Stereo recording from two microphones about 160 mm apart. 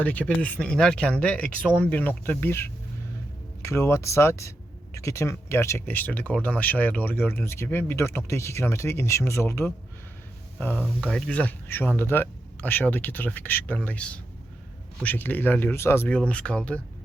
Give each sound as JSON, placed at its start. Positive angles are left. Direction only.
{"t": 0.0, "sound": "speech", "side_deg": 10}
{"t": 11.0, "sound": "speech", "side_deg": 5}